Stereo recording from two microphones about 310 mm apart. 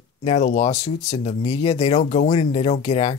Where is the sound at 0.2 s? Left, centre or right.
Left.